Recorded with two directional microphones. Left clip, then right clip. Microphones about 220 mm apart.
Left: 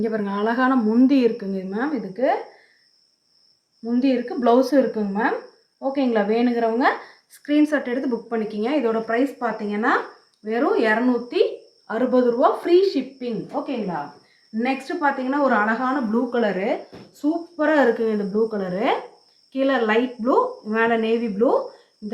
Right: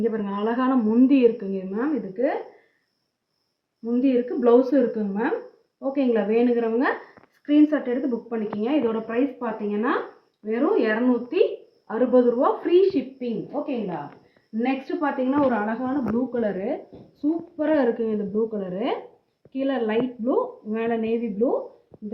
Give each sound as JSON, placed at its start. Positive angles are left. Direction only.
{"t": 0.0, "sound": "a woman's voice", "side_deg": 35}
{"t": 3.8, "sound": "a woman's voice", "side_deg": 30}
{"t": 7.4, "sound": "a woman's voice", "side_deg": 35}
{"t": 14.6, "sound": "a woman's voice", "side_deg": 5}